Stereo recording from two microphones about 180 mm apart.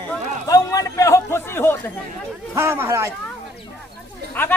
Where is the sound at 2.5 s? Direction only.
15° right (ahead or behind).